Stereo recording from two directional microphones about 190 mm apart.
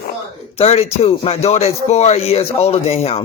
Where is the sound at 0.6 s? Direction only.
35° left (ahead or behind).